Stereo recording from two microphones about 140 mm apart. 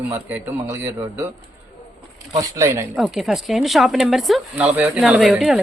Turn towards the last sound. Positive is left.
turn(degrees=-5)  # may be behind; listen again after turning